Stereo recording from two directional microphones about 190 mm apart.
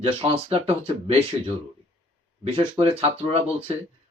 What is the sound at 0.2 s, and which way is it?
Speech, 30° right (ahead or behind).